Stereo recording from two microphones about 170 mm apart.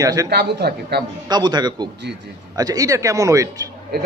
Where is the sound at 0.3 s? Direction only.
70° right (ahead or behind).